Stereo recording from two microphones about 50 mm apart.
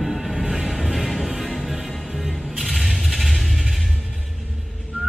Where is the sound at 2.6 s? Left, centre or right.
Centre.